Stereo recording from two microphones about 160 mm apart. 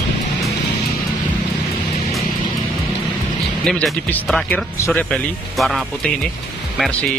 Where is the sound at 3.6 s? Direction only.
5° left (ahead or behind).